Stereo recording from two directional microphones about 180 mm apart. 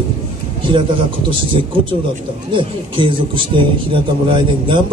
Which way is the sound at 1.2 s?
30° right (ahead or behind).